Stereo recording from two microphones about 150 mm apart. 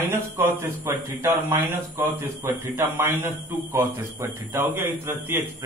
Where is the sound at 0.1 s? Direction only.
15° right (ahead or behind).